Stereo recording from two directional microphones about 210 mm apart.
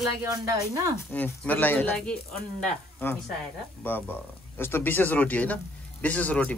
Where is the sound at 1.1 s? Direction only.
5° left (ahead or behind).